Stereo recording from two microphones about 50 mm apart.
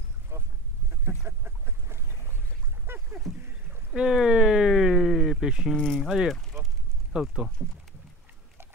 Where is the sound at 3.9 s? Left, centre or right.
Centre.